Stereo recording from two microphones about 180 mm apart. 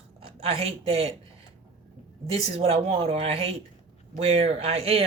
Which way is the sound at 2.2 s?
35° right (ahead or behind).